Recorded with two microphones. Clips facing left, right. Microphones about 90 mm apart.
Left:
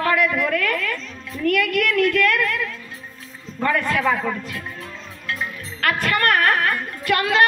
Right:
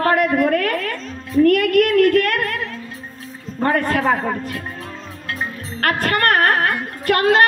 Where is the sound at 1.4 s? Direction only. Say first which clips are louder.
Right 5 dB; 45° right (ahead or behind).